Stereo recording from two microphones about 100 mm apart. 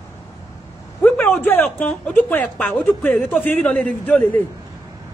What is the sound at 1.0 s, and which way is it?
A man's voice, 15° left (ahead or behind).